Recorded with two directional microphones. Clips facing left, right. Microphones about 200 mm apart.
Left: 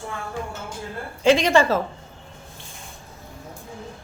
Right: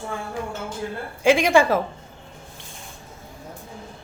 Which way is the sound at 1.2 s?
10° right (ahead or behind).